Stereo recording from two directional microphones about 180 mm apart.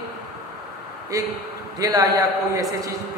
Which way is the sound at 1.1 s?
20° right (ahead or behind).